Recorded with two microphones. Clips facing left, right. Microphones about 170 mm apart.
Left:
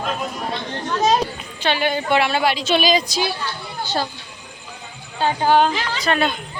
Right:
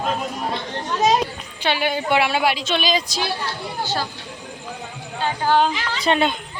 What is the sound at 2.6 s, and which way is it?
Speech, 5° left (ahead or behind).